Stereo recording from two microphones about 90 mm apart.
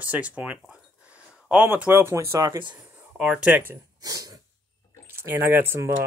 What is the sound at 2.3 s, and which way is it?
Speech, 35° right (ahead or behind).